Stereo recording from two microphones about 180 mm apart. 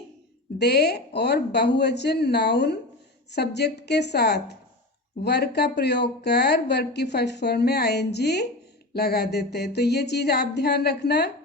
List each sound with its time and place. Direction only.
0.6 s speech: 65° left (ahead or behind)